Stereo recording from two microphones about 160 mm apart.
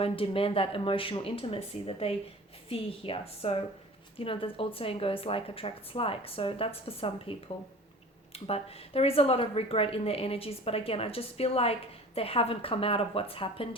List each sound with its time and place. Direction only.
0.0 s speech: 35° left (ahead or behind)